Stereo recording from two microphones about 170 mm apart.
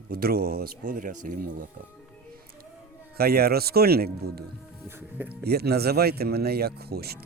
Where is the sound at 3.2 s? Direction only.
65° right (ahead or behind).